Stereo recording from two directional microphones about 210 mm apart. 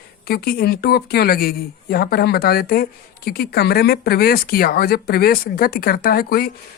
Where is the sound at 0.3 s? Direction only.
50° left (ahead or behind).